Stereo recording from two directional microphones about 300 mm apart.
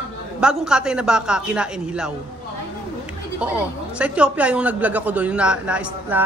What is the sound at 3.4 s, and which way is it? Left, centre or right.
Speech, centre.